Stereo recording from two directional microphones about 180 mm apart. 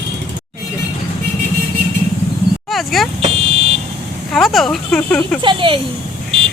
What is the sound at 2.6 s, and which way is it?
Speech, centre (ahead or behind).